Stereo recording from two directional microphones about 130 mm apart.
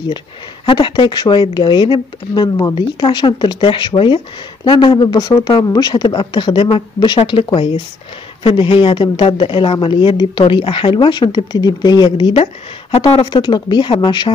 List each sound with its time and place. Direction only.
0.7 s speech: 35° left (ahead or behind)